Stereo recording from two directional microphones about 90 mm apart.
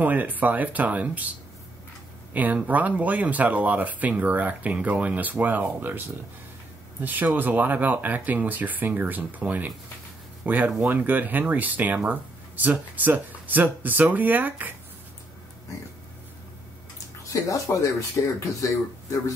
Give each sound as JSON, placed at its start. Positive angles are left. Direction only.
{"t": 0.0, "sound": "speech", "side_deg": -20}
{"t": 2.3, "sound": "speech", "side_deg": -15}
{"t": 17.3, "sound": "speech", "side_deg": 40}